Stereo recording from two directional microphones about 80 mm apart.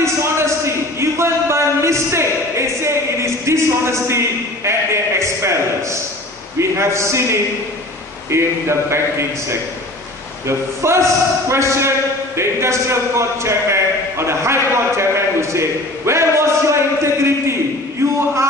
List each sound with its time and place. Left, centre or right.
0.0 s a sound: right
6.6 s a man's voice: right
10.4 s a man's voice: right